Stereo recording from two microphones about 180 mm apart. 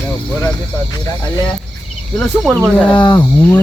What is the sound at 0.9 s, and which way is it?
Speech, 20° left (ahead or behind).